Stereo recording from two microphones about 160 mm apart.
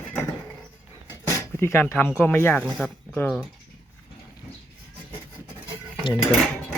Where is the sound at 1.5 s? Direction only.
15° left (ahead or behind).